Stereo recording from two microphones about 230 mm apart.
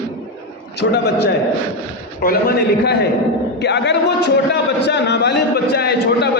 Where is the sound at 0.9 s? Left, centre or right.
Left.